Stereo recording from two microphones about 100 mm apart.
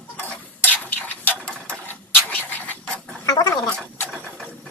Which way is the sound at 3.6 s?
5° left (ahead or behind).